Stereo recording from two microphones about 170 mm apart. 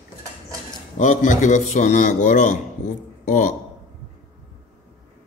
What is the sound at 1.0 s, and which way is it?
A man's voice, 45° left (ahead or behind).